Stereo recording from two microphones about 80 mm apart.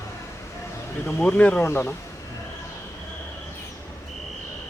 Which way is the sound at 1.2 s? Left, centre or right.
Centre.